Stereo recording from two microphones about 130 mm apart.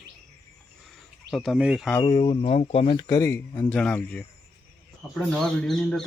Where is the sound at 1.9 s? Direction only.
30° left (ahead or behind); by 3.0 s 45° left (ahead or behind).